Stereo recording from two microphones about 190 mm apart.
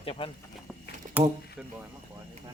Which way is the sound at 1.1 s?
45° right (ahead or behind).